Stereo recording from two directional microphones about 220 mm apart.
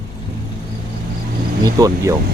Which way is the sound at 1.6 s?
15° right (ahead or behind).